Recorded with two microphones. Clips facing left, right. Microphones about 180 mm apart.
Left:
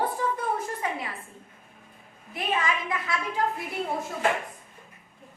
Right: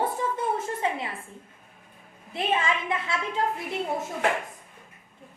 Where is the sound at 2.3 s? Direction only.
25° right (ahead or behind).